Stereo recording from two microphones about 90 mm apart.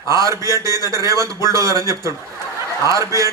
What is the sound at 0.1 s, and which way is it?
A man's voice, 40° right (ahead or behind).